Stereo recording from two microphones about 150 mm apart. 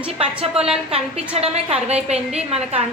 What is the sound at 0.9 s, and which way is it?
A woman's voice, 40° right (ahead or behind).